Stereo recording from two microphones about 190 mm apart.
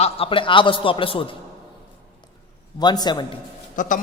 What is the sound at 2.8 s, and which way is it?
Speech, 20° left (ahead or behind).